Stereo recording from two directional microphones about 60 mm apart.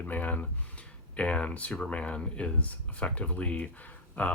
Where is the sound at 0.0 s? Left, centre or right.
Left.